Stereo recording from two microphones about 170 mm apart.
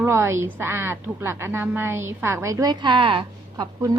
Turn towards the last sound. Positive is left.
turn(degrees=-30)  # may be behind; listen again after turning